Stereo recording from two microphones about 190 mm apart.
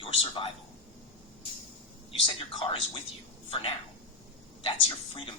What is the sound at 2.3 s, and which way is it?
A woman's voice, 25° left (ahead or behind).